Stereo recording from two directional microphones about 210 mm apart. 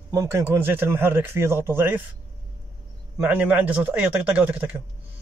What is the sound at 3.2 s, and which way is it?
Speech, 5° right (ahead or behind).